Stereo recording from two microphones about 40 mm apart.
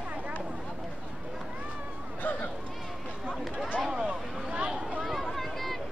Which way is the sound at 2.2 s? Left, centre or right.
Left.